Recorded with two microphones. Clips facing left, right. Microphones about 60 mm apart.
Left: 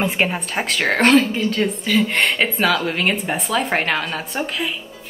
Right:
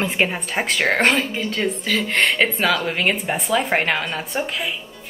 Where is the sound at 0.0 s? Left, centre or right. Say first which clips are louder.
Left 1 dB; centre.